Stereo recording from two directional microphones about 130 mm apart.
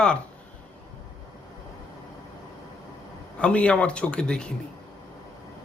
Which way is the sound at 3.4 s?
10° left (ahead or behind).